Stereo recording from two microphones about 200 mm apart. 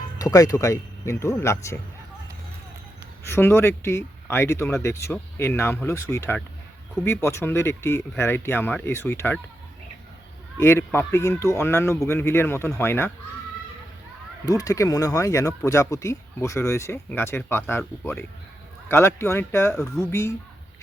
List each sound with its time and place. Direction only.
0.2 s speech: 15° left (ahead or behind)
3.2 s speech: 10° left (ahead or behind)
10.6 s speech: 10° left (ahead or behind)
14.4 s speech: 15° left (ahead or behind)